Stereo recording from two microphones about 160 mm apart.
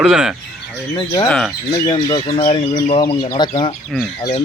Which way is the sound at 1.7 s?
30° left (ahead or behind).